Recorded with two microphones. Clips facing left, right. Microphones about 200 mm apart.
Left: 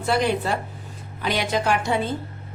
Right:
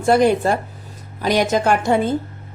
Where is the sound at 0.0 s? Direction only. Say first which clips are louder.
Right 7 dB; 45° right (ahead or behind).